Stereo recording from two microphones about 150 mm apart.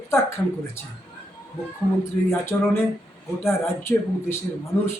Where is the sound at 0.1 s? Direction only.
15° left (ahead or behind).